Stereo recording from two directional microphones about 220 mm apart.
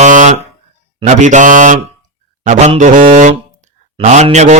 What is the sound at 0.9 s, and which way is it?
Mantra, 35° right (ahead or behind).